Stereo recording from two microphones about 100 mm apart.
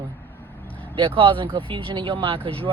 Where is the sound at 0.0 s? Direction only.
15° left (ahead or behind).